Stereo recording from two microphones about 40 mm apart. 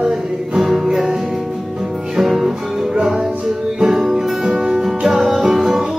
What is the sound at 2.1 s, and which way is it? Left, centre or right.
Music, centre.